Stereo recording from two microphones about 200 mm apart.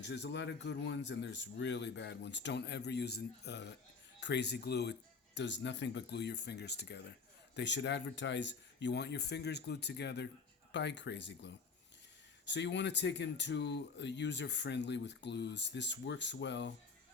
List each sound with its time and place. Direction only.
0.0 s speech: 60° left (ahead or behind)